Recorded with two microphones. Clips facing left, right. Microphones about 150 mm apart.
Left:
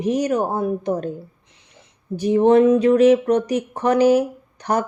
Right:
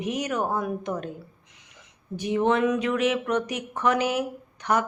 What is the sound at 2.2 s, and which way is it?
Speech, 35° left (ahead or behind).